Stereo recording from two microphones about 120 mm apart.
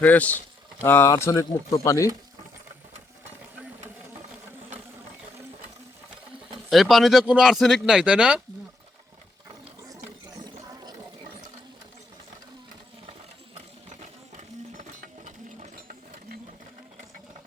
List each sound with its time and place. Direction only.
0.0 s speech: 15° left (ahead or behind)
6.7 s speech: centre (ahead or behind)
9.9 s a sound: 30° right (ahead or behind)
13.9 s sewing machine: 85° right